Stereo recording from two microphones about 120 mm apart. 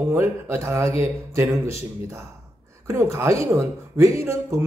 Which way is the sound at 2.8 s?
20° right (ahead or behind).